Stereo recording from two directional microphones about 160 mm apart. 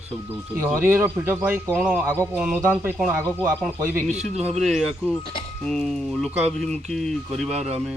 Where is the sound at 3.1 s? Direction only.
20° right (ahead or behind).